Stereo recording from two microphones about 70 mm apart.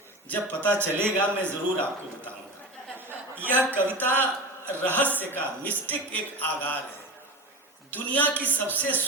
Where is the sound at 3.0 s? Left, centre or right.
Right.